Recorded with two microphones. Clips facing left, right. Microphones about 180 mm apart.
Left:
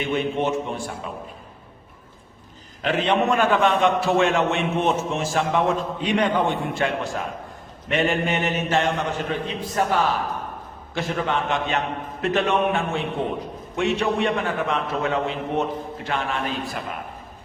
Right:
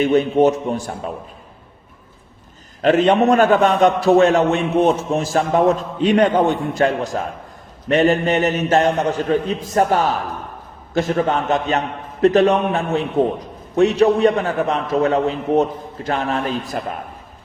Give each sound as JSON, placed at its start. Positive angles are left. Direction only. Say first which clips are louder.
{"t": 0.0, "sound": "a man's voice", "louder": "right 9 dB", "side_deg": -40}
{"t": 2.8, "sound": "a man's voice", "louder": "right 7 dB", "side_deg": -45}